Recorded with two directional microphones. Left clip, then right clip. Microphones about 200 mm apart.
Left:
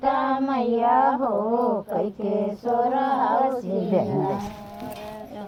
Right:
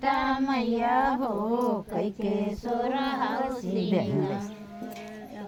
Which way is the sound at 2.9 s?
35° right (ahead or behind).